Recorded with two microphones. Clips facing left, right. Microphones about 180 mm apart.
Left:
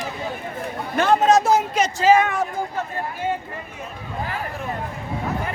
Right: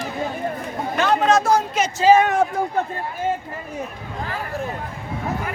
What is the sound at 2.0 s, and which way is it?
Speech, 25° right (ahead or behind).